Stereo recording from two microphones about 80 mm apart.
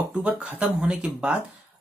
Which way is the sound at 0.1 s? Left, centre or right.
Centre.